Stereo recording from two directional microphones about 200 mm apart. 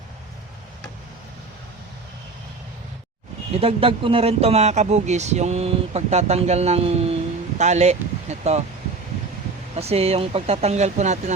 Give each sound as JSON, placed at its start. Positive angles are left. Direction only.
{"t": 3.5, "sound": "speech", "side_deg": -30}
{"t": 9.7, "sound": "speech", "side_deg": -30}